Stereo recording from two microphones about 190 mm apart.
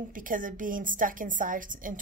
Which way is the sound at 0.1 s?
45° right (ahead or behind).